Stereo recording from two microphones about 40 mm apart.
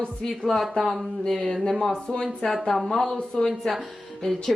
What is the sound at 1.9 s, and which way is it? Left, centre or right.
Speech, left.